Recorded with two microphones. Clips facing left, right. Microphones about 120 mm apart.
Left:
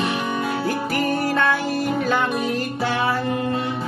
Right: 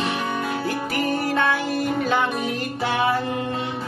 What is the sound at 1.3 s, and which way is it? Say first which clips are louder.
Music: even; 20° right (ahead or behind).